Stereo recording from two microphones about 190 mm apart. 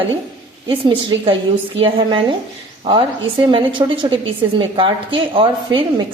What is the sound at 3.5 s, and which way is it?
A woman's voice, 25° right (ahead or behind).